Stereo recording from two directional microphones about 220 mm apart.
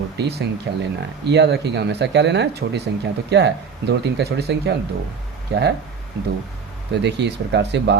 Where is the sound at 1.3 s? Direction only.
50° right (ahead or behind).